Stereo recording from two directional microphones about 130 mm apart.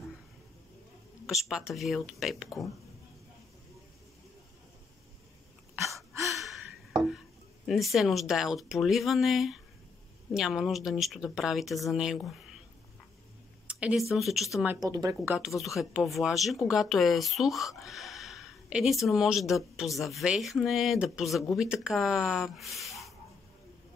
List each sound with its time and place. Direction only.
1.2 s speech: 5° right (ahead or behind)
5.8 s a sound: centre (ahead or behind)
7.6 s speech: centre (ahead or behind)
13.7 s a sound: 10° right (ahead or behind)
14.1 s speech: centre (ahead or behind)
14.8 s speech: 30° right (ahead or behind)
15.3 s speech: centre (ahead or behind)